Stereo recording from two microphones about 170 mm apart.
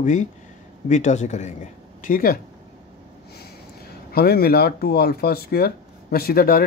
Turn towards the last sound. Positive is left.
turn(degrees=60)  # may be behind; listen again after turning